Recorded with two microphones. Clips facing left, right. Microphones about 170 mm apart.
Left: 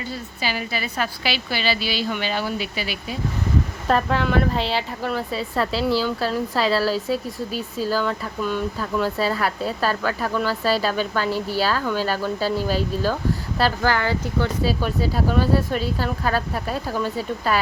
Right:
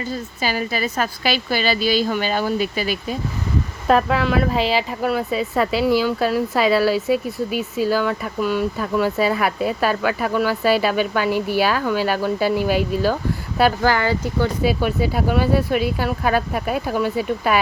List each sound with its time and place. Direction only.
0.1 s a woman's voice: 45° right (ahead or behind)
3.8 s speech: 5° right (ahead or behind)